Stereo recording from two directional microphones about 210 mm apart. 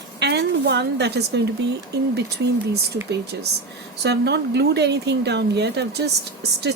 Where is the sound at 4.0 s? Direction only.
55° right (ahead or behind).